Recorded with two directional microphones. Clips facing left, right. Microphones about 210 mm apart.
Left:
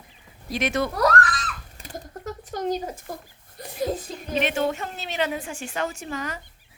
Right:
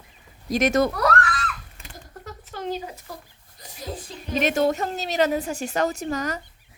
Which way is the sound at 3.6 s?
60° left (ahead or behind).